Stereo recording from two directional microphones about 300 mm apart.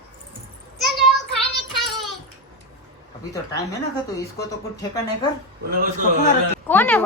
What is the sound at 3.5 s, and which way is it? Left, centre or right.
Speech, centre.